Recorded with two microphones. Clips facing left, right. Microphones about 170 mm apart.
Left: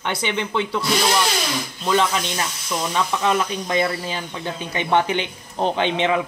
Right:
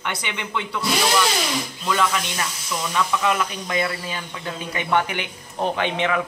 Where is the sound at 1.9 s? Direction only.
30° left (ahead or behind).